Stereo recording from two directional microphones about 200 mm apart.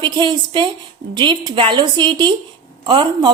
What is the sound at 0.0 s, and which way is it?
A man's voice, 25° right (ahead or behind).